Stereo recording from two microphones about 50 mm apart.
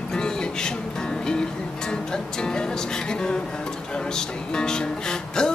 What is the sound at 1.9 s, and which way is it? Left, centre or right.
Music, centre.